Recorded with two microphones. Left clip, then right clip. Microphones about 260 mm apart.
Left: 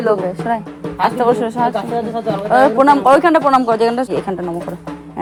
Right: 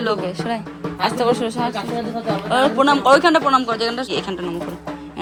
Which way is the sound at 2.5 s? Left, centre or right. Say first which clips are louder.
Left 6 dB; centre.